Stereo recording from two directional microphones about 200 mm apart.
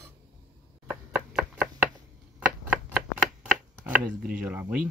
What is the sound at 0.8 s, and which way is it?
Chopping, 10° right (ahead or behind).